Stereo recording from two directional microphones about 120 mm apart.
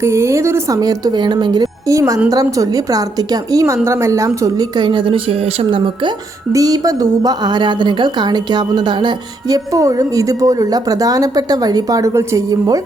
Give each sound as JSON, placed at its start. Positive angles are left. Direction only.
{"t": 0.0, "sound": "a woman's voice", "side_deg": -20}
{"t": 1.9, "sound": "a woman's voice", "side_deg": -25}
{"t": 6.5, "sound": "a woman's voice", "side_deg": -30}
{"t": 9.7, "sound": "speech", "side_deg": -30}